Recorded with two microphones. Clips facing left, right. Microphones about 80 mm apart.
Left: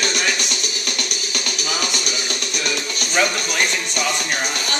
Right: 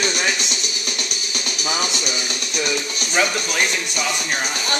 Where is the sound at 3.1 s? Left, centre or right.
Centre.